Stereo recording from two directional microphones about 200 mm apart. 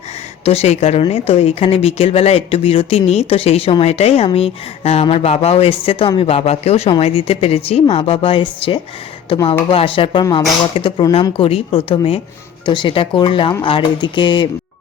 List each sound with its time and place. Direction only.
0.4 s speech: 30° left (ahead or behind)